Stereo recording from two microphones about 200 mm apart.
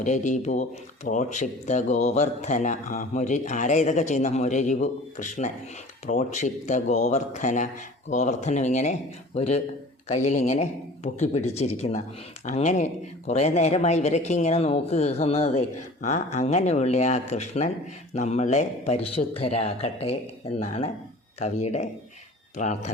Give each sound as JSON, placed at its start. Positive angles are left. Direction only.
{"t": 0.0, "sound": "speech", "side_deg": 40}